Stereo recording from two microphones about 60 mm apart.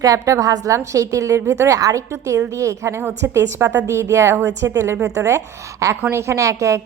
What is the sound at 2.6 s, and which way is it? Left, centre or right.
A woman's voice, right.